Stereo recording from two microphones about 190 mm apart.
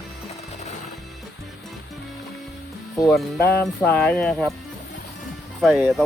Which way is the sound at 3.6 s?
5° left (ahead or behind).